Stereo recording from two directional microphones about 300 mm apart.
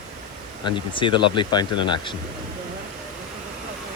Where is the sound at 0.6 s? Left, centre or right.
Centre.